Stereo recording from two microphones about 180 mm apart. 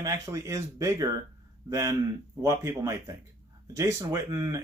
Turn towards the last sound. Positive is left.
turn(degrees=-20)  # may be behind; listen again after turning